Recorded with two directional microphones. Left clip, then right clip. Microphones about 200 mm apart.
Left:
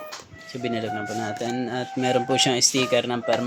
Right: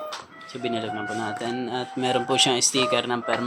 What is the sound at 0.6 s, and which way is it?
Speech, 65° left (ahead or behind).